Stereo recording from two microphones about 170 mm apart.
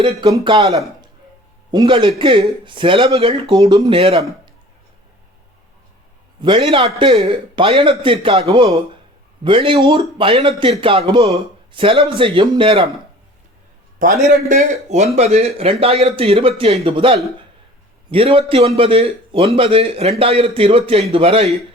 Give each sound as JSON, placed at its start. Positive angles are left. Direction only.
{"t": 0.0, "sound": "speech", "side_deg": -25}
{"t": 1.7, "sound": "speech", "side_deg": -25}
{"t": 3.5, "sound": "speech", "side_deg": -25}
{"t": 6.4, "sound": "a man's voice", "side_deg": -25}
{"t": 14.3, "sound": "a man's voice", "side_deg": -45}